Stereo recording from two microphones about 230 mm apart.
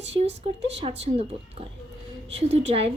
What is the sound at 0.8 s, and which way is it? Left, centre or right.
Speech, right.